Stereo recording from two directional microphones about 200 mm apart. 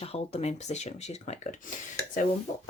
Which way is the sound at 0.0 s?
30° left (ahead or behind).